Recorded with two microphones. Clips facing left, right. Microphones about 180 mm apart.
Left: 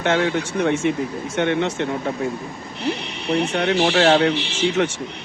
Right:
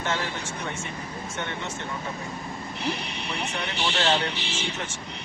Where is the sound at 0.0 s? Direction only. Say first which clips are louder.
Left 10 dB; 70° left (ahead or behind).